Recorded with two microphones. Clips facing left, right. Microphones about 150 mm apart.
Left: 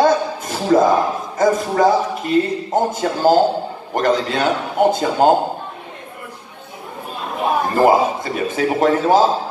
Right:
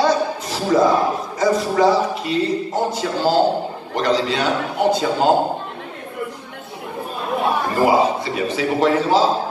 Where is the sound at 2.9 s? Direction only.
50° left (ahead or behind).